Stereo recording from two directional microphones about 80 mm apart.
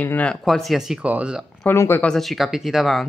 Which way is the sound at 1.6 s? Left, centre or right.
Left.